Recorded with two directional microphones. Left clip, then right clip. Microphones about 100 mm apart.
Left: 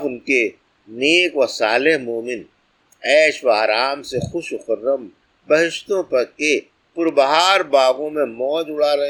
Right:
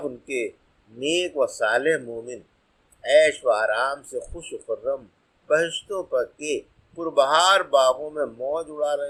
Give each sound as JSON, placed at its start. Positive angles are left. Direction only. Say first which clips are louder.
{"t": 0.3, "sound": "speech", "louder": "left 14 dB", "side_deg": 40}